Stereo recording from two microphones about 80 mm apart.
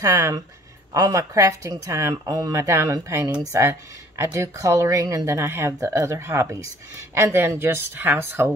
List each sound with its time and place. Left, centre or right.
0.0 s speech: right
2.2 s speech: right
2.5 s speech: right